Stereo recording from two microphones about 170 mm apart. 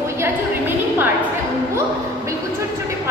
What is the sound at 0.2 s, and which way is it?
Music, 10° right (ahead or behind).